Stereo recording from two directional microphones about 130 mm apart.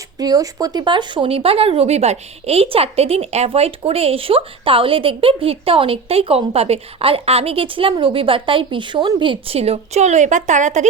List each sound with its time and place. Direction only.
0.2 s speech: 30° right (ahead or behind); by 10.8 s 65° right (ahead or behind)